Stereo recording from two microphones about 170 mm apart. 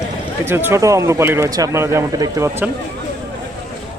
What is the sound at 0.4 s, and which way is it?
Speech, 15° right (ahead or behind).